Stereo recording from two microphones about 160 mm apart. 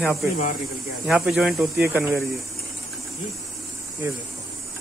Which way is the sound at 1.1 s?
5° right (ahead or behind).